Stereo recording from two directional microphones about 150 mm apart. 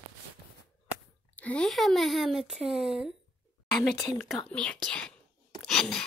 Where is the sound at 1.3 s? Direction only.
10° left (ahead or behind).